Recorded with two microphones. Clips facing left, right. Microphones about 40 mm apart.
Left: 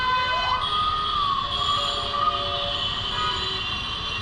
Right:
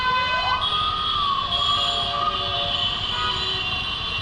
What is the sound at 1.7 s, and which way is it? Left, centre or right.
Train, right.